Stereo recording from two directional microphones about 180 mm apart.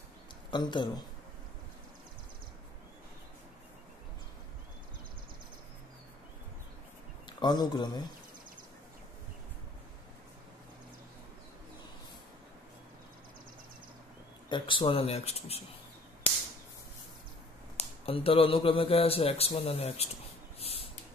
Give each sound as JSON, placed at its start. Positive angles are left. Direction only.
{"t": 0.5, "sound": "speech", "side_deg": 25}
{"t": 7.2, "sound": "a man's voice", "side_deg": 25}
{"t": 14.5, "sound": "speech", "side_deg": 30}
{"t": 17.7, "sound": "speech", "side_deg": 30}
{"t": 20.5, "sound": "a sound", "side_deg": 35}